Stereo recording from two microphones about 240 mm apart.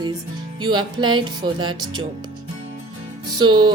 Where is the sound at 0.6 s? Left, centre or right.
Centre.